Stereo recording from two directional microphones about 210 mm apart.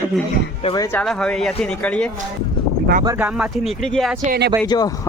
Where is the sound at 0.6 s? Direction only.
20° left (ahead or behind).